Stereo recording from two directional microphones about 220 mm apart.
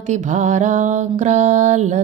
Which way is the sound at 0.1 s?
35° right (ahead or behind).